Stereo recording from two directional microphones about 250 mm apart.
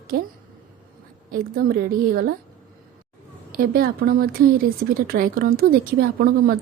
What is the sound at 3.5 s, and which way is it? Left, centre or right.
Speech, right.